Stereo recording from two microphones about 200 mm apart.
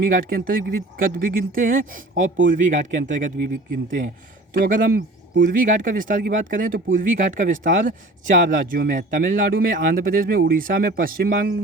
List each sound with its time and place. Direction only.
0.0 s speech: 45° right (ahead or behind)
4.5 s speech: 45° right (ahead or behind)